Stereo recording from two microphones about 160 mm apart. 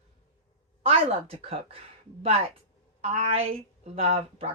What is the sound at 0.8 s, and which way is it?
Speech, 40° right (ahead or behind).